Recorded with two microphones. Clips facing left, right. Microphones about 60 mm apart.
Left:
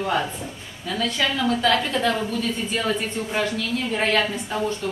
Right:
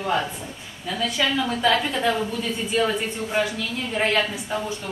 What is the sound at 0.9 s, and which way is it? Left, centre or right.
A woman's voice, centre.